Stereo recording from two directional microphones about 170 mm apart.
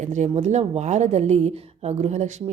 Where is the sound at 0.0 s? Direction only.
45° right (ahead or behind).